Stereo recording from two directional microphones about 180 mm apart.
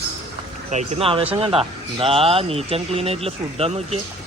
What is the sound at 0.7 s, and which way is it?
Speech, 35° right (ahead or behind).